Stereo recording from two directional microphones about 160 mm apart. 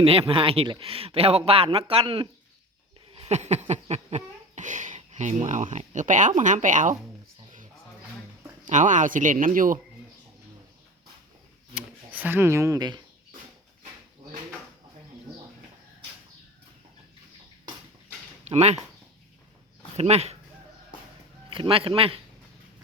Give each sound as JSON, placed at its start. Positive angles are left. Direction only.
{"t": 0.0, "sound": "speech", "side_deg": -35}
{"t": 3.1, "sound": "a sound", "side_deg": -40}
{"t": 8.6, "sound": "speech", "side_deg": -50}
{"t": 11.7, "sound": "speech", "side_deg": -10}
{"t": 18.4, "sound": "speech", "side_deg": -45}
{"t": 20.0, "sound": "speech", "side_deg": -40}
{"t": 21.5, "sound": "speech", "side_deg": -35}